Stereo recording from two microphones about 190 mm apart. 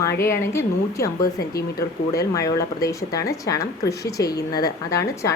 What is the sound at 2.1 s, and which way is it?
Speech, 15° left (ahead or behind).